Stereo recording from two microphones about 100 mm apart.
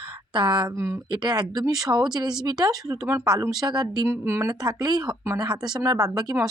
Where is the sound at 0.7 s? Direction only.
30° right (ahead or behind).